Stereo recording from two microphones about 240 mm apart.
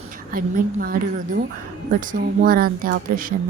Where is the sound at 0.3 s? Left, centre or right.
Right.